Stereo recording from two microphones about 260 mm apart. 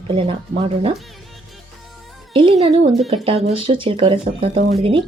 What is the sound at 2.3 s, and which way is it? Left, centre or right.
A woman's voice, centre.